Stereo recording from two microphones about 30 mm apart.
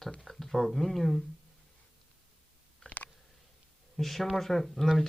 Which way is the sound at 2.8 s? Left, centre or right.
Left.